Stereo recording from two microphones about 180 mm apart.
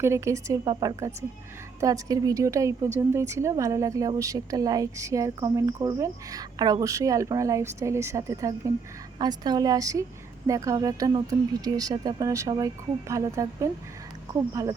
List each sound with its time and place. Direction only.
0.0 s a woman's voice: 15° right (ahead or behind)